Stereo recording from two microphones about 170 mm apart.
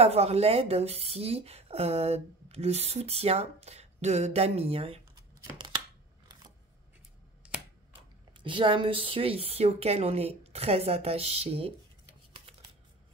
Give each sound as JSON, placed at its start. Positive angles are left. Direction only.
{"t": 0.0, "sound": "a woman's voice", "side_deg": -35}
{"t": 7.4, "sound": "scissors", "side_deg": -5}
{"t": 8.3, "sound": "a woman's voice", "side_deg": -30}